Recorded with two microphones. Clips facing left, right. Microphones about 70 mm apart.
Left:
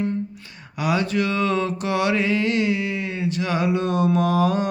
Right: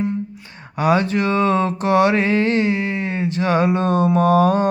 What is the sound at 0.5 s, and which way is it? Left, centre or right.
Mantra, right.